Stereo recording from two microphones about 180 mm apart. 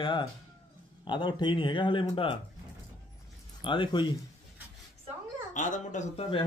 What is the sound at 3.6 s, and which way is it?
Speech, 25° left (ahead or behind).